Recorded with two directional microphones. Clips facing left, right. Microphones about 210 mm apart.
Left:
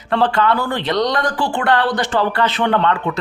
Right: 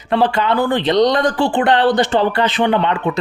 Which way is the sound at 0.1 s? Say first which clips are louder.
Right 1 dB; 15° right (ahead or behind).